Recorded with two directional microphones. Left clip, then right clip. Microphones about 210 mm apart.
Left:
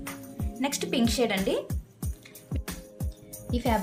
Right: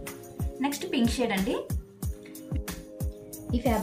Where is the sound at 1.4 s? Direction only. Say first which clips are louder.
Left 2 dB; centre (ahead or behind).